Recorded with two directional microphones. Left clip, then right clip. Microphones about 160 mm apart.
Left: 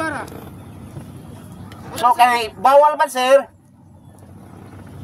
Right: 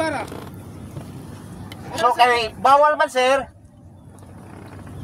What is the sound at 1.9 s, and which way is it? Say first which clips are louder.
Speech: left 2 dB; 50° left (ahead or behind).